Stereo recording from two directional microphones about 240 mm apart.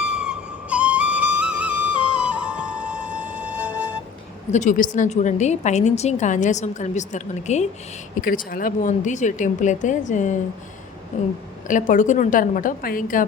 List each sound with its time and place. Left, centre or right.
0.0 s flute: centre
4.5 s a woman's voice: left
11.7 s speech: left